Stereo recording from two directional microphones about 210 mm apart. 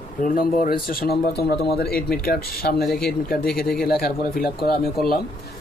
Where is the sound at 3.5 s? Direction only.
Centre (ahead or behind).